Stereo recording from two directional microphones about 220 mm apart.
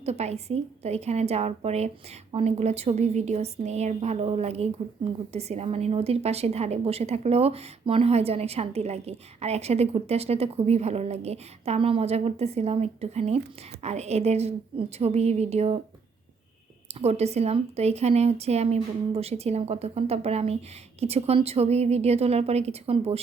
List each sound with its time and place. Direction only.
0.0 s a woman's voice: 30° right (ahead or behind)
16.9 s a woman's voice: 30° right (ahead or behind)